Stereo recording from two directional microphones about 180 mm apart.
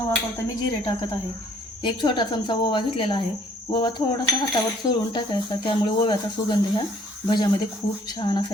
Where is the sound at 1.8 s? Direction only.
25° left (ahead or behind).